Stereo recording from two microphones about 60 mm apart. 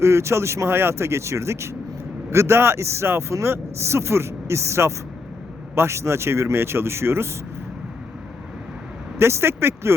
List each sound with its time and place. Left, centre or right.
0.0 s speech: right
9.1 s speech: right